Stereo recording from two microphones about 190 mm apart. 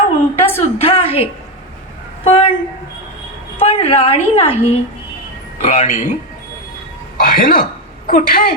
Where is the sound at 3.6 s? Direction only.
30° left (ahead or behind).